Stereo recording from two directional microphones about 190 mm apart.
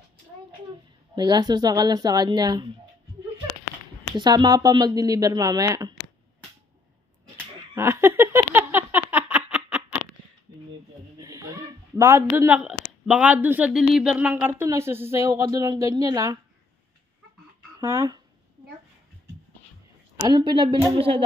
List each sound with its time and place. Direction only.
1.1 s speech: 20° right (ahead or behind)
4.2 s speech: 20° right (ahead or behind)
7.7 s a sound: 15° right (ahead or behind)
11.1 s speech: 20° right (ahead or behind)
17.7 s speech: 15° right (ahead or behind)
20.2 s speech: 25° right (ahead or behind)